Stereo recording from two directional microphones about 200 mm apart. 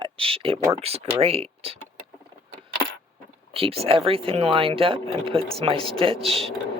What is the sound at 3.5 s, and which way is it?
Speech, 30° right (ahead or behind).